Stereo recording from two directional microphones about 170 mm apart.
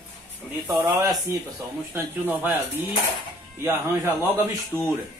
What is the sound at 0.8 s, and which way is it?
Speech, 15° right (ahead or behind).